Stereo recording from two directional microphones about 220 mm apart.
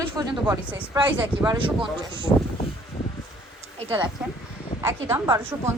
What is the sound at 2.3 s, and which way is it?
Speech, 20° left (ahead or behind).